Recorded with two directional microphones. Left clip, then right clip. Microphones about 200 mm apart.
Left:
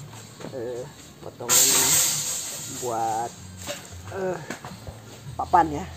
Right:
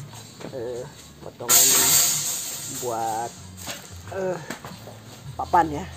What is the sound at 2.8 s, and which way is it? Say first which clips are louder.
Speech: left 1 dB; 5° left (ahead or behind).